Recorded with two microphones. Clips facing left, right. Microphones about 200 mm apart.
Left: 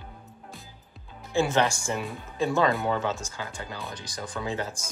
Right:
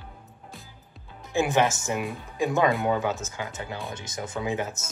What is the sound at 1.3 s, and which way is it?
Speech, 15° right (ahead or behind).